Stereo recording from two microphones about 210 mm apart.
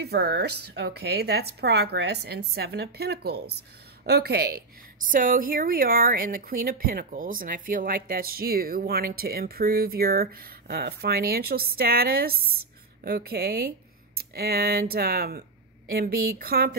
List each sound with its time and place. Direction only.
0.0 s a woman's voice: 50° right (ahead or behind)